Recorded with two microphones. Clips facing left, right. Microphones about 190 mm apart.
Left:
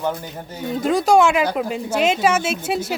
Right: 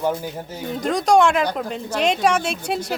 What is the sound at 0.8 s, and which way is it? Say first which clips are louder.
Speech: left 1 dB; 5° left (ahead or behind).